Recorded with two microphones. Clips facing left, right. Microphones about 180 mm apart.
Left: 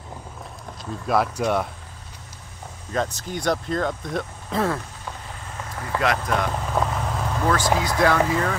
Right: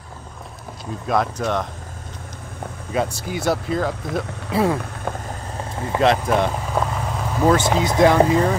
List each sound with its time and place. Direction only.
1.0 s speech: 5° left (ahead or behind)
2.9 s speech: 10° right (ahead or behind)
5.1 s vehicle: 55° right (ahead or behind)
5.6 s vehicle: 25° right (ahead or behind)
6.2 s speech: 25° right (ahead or behind)
6.5 s vehicle: centre (ahead or behind)
7.4 s speech: 25° right (ahead or behind)